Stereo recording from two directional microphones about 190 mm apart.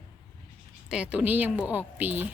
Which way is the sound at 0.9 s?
5° right (ahead or behind).